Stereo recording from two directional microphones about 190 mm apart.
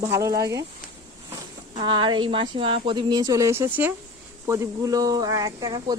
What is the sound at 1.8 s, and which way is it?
Speech, 25° right (ahead or behind).